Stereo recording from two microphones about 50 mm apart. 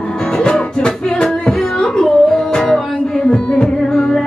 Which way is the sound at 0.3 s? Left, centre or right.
Centre.